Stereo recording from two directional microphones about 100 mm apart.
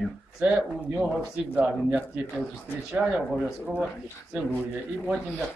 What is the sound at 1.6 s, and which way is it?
Speech, 15° right (ahead or behind).